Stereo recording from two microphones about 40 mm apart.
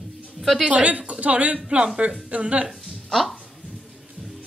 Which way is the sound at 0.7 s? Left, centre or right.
Right.